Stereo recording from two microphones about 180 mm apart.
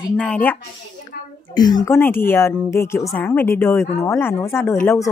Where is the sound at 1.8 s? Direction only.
10° left (ahead or behind).